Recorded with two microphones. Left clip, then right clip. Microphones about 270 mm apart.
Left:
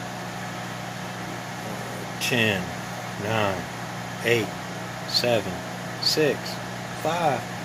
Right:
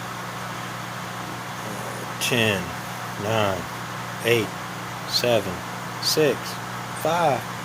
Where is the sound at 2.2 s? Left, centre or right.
Centre.